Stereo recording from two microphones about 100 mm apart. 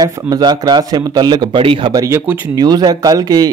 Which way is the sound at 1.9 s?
35° right (ahead or behind).